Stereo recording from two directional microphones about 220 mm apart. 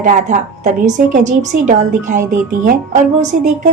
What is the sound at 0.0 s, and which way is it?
A woman's voice, 35° right (ahead or behind).